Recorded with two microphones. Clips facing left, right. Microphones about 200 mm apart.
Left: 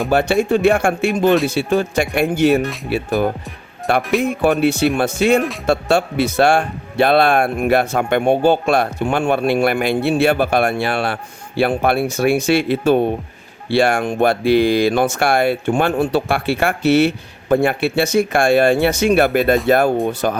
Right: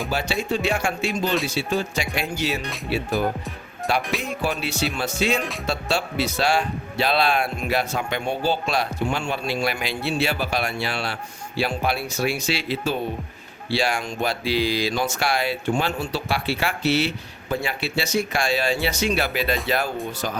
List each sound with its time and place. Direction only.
0.1 s speech: 55° left (ahead or behind)